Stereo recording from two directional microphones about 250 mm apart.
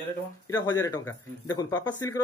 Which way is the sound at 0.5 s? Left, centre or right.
Centre.